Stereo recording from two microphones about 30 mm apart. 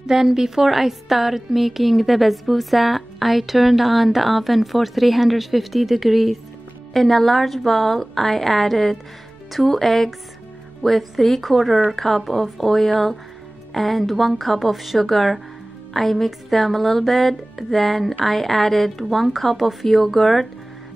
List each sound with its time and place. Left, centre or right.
0.0 s a woman's voice: centre